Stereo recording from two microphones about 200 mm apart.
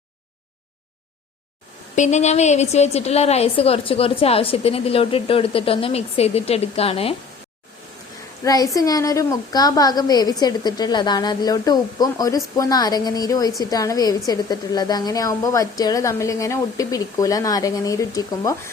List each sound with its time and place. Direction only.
2.0 s a woman's voice: 35° left (ahead or behind)
8.4 s a woman's voice: 15° left (ahead or behind)